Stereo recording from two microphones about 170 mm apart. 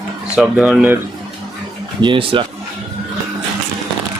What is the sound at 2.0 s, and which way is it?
Speech, 30° right (ahead or behind).